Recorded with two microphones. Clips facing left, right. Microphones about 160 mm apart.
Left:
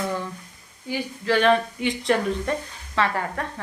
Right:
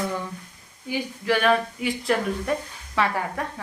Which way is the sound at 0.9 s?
10° right (ahead or behind).